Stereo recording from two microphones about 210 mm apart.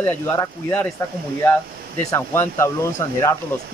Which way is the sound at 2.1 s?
10° left (ahead or behind).